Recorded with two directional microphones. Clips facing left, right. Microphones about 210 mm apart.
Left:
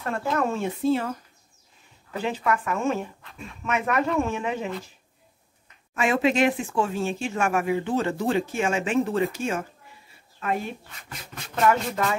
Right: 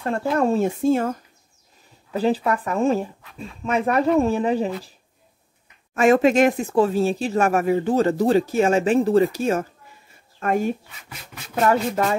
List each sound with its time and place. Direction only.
0.0 s speech: 30° right (ahead or behind)
0.8 s speech: 45° right (ahead or behind)
2.1 s speech: 35° right (ahead or behind)
5.9 s speech: 45° right (ahead or behind)
10.9 s speech: 5° right (ahead or behind)
11.6 s speech: 40° right (ahead or behind)